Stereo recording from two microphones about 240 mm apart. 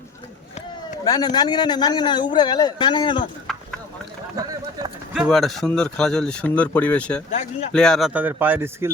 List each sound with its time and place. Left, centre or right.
1.0 s speech: centre
3.4 s clip-clop: centre
5.1 s speech: centre